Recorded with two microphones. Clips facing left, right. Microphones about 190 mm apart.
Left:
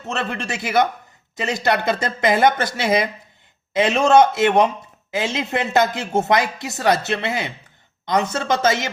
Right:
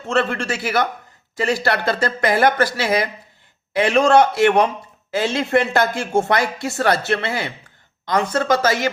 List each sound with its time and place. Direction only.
0.0 s speech: 20° left (ahead or behind)